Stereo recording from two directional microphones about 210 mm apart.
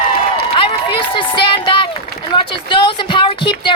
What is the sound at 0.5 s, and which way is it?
Run, 25° left (ahead or behind).